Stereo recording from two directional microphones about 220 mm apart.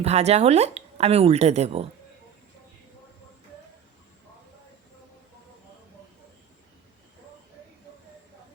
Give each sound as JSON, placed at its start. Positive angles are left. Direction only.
{"t": 0.0, "sound": "speech", "side_deg": -30}